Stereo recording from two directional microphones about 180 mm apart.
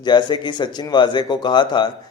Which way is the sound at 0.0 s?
25° left (ahead or behind).